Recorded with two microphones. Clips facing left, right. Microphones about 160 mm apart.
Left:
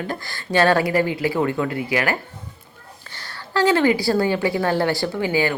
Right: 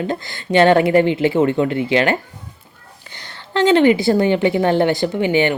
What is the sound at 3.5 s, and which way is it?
A woman's voice, 20° right (ahead or behind).